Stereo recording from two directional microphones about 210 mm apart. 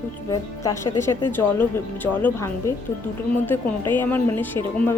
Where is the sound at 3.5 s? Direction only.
10° left (ahead or behind).